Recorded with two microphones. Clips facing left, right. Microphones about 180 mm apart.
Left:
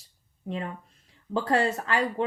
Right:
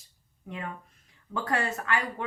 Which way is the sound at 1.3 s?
30° left (ahead or behind).